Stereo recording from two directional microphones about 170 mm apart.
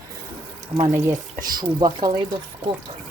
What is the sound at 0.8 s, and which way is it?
Speech, 15° right (ahead or behind).